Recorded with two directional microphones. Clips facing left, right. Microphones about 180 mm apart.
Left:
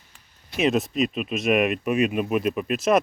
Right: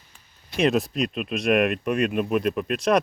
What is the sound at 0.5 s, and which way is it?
Speech, centre (ahead or behind).